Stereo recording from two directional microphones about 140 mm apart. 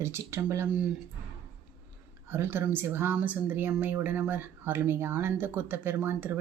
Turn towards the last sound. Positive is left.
turn(degrees=-15)  # may be behind; listen again after turning